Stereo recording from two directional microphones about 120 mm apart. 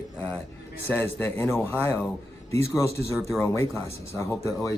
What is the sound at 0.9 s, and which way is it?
Speech, 15° left (ahead or behind).